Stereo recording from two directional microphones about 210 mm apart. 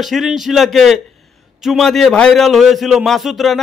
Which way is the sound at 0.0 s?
Centre (ahead or behind).